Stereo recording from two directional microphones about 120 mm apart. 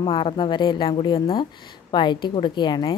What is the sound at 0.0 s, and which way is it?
Speech, 45° left (ahead or behind).